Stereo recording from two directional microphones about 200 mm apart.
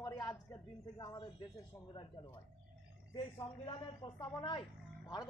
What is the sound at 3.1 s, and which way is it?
A woman's voice, 25° left (ahead or behind).